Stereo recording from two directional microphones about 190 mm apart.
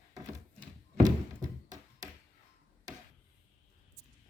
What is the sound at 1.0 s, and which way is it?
Thunk, 20° right (ahead or behind).